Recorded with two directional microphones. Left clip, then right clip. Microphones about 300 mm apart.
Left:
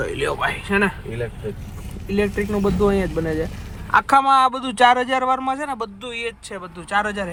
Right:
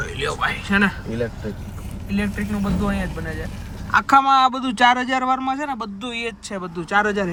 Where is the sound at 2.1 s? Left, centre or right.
Centre.